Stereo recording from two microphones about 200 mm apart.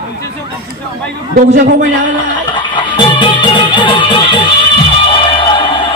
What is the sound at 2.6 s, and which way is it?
Music, 25° left (ahead or behind).